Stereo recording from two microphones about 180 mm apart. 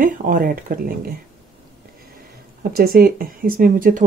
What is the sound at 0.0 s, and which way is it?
Speech, 50° right (ahead or behind).